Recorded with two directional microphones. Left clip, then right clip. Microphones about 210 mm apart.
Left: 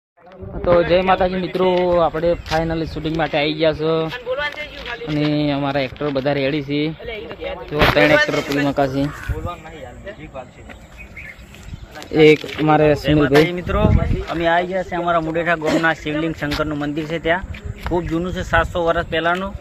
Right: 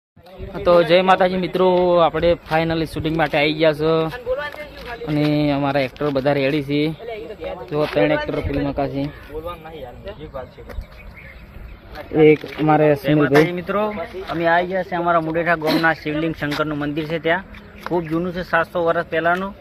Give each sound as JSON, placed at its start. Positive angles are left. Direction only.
{"t": 0.6, "sound": "speech", "side_deg": -5}
{"t": 4.1, "sound": "a sound", "side_deg": -30}
{"t": 5.3, "sound": "speech", "side_deg": -5}
{"t": 7.1, "sound": "a sound", "side_deg": -45}
{"t": 7.9, "sound": "speech", "side_deg": 30}
{"t": 8.3, "sound": "speech", "side_deg": 45}
{"t": 12.5, "sound": "speech", "side_deg": 10}
{"t": 18.2, "sound": "speech", "side_deg": 10}